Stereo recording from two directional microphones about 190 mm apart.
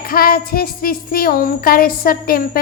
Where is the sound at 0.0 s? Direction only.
50° left (ahead or behind).